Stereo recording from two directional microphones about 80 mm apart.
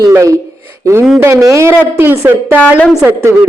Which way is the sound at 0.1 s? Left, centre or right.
Right.